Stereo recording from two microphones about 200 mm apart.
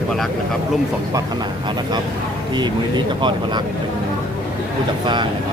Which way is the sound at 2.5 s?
20° right (ahead or behind).